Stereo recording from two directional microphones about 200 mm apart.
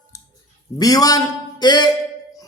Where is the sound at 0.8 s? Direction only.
20° left (ahead or behind).